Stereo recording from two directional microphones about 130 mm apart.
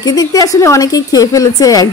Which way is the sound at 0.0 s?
30° left (ahead or behind).